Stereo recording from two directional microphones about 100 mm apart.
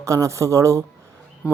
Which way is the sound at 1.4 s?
10° right (ahead or behind).